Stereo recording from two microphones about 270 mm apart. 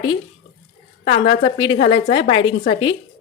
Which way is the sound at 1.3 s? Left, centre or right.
Left.